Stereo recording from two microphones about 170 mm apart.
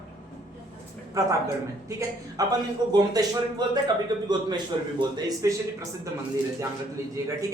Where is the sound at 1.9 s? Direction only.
15° right (ahead or behind).